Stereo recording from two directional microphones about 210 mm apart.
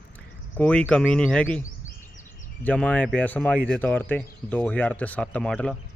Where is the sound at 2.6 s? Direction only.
5° left (ahead or behind).